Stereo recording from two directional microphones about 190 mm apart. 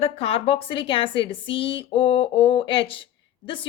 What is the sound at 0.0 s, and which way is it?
A woman's voice, 30° left (ahead or behind).